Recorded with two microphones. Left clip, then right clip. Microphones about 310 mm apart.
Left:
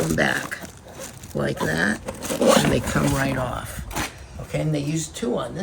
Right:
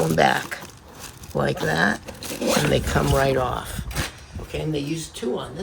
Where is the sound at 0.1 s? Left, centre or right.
Right.